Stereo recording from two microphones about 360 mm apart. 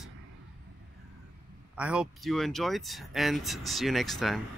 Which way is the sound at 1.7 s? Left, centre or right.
Centre.